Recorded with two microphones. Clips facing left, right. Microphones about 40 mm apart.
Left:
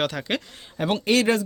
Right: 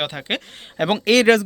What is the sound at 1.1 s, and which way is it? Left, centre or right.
Speech, right.